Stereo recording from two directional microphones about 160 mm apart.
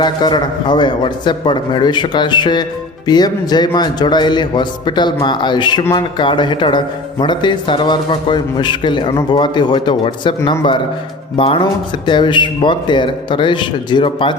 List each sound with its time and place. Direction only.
0.0 s speech: 25° left (ahead or behind)